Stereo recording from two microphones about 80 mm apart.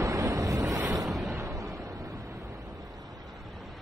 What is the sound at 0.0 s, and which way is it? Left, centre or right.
Waves, right.